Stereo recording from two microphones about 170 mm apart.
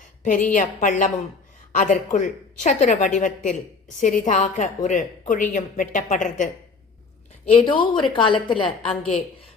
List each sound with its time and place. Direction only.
0.2 s speech: 50° left (ahead or behind)
7.4 s a woman's voice: 35° left (ahead or behind)